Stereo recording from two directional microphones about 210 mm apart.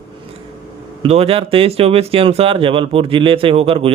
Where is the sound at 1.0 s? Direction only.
30° right (ahead or behind).